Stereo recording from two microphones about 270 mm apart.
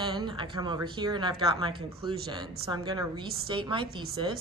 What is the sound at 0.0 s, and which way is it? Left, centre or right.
Speech, centre.